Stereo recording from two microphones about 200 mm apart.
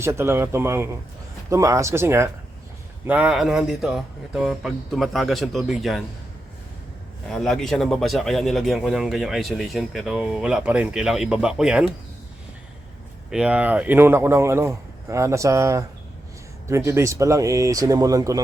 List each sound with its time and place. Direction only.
0.0 s speech: 15° right (ahead or behind)
7.3 s speech: centre (ahead or behind)
13.3 s speech: 5° right (ahead or behind)